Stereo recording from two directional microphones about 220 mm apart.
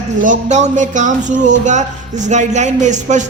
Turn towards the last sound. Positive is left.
turn(degrees=-35)  # may be behind; listen again after turning